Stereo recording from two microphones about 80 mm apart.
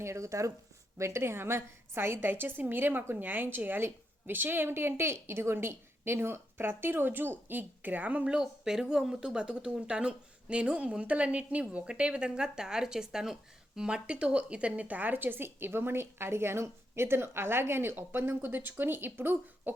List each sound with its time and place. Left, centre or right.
0.0 s a woman's voice: right